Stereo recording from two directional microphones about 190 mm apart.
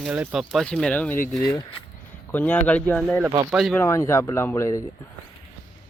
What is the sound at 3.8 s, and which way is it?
Speech, 15° left (ahead or behind).